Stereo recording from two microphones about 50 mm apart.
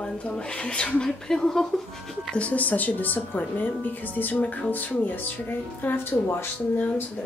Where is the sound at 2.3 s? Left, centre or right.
Left.